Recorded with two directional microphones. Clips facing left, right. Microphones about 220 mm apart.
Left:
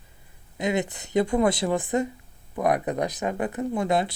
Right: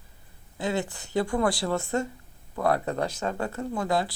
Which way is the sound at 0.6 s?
20° left (ahead or behind).